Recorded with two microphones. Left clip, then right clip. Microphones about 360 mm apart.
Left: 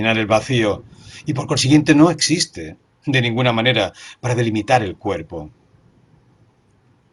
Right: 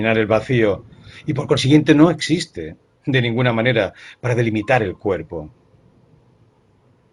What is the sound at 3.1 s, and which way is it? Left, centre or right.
Speech, left.